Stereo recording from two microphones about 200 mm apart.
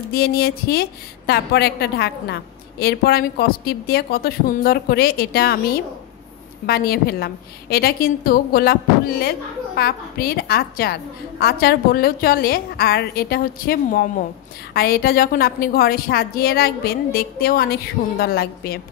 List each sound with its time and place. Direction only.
0.1 s a woman's voice: 50° left (ahead or behind)
6.6 s a woman's voice: 50° left (ahead or behind)
9.8 s a woman's voice: 50° left (ahead or behind)